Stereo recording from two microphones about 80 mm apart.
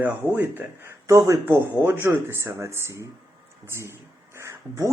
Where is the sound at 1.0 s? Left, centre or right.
Right.